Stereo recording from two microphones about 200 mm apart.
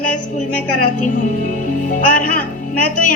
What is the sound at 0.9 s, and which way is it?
Speech, 40° left (ahead or behind).